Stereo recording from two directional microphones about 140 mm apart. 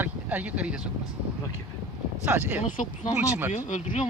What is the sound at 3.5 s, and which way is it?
Speech, 55° left (ahead or behind).